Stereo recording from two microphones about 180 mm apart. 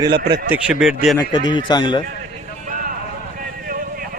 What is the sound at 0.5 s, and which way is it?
Speech, 5° right (ahead or behind).